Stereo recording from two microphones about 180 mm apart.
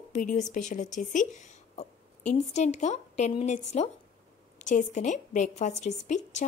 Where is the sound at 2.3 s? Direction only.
40° left (ahead or behind).